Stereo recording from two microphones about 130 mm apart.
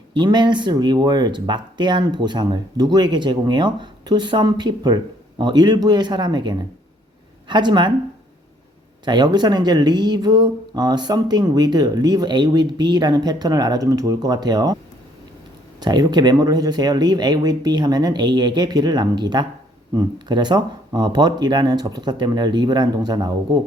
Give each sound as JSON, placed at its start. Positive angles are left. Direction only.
{"t": 0.1, "sound": "speech", "side_deg": -35}
{"t": 9.0, "sound": "speech", "side_deg": -35}
{"t": 15.8, "sound": "speech", "side_deg": -30}